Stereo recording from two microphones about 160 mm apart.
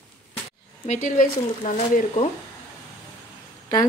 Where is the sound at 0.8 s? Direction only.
50° left (ahead or behind).